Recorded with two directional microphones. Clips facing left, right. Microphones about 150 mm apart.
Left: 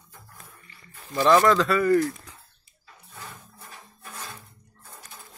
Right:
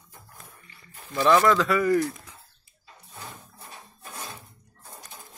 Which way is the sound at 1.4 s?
10° right (ahead or behind).